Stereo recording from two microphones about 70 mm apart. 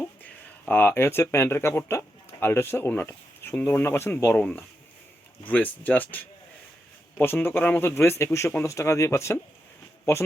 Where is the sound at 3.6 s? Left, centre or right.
Left.